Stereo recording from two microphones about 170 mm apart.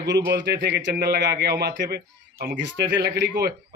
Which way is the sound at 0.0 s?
90° right.